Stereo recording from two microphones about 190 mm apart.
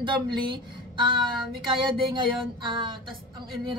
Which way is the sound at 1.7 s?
25° right (ahead or behind).